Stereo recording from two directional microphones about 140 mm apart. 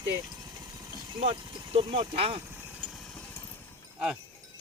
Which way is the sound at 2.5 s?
10° right (ahead or behind).